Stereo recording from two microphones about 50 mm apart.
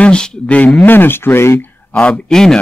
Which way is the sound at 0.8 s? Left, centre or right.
Left.